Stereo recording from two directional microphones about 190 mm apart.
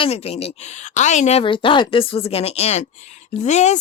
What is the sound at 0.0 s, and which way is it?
A woman's voice, 30° left (ahead or behind).